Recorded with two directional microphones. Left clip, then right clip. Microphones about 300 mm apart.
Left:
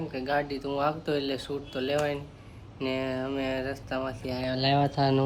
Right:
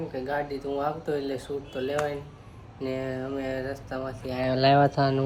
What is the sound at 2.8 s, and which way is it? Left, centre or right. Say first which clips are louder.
Speech: left 1 dB; centre.